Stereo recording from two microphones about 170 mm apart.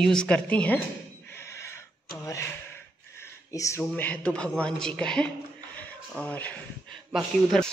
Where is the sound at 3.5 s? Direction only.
20° left (ahead or behind).